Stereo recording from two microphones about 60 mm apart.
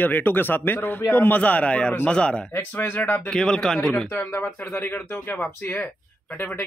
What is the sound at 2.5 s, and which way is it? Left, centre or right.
Speech, left.